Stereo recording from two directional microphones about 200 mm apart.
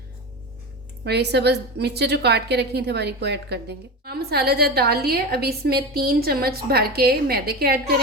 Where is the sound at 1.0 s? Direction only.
55° right (ahead or behind).